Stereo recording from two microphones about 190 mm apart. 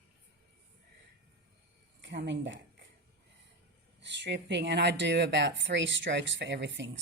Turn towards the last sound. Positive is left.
turn(degrees=-70)  # may be behind; listen again after turning